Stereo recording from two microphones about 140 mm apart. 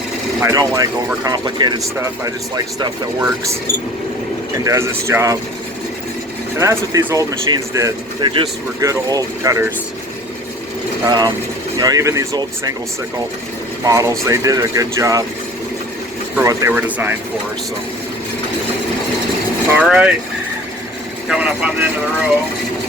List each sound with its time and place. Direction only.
0.4 s speech: 20° right (ahead or behind)
4.6 s speech: 20° right (ahead or behind)
6.6 s speech: 20° right (ahead or behind)
11.0 s speech: 25° right (ahead or behind)
13.8 s speech: 20° right (ahead or behind)
16.4 s speech: 20° right (ahead or behind)
19.7 s speech: 5° right (ahead or behind)
21.2 s speech: 5° right (ahead or behind)